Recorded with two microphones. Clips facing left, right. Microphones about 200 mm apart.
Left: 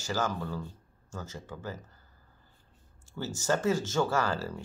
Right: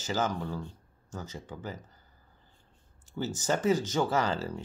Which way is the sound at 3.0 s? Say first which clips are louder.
Right 1 dB; 15° right (ahead or behind).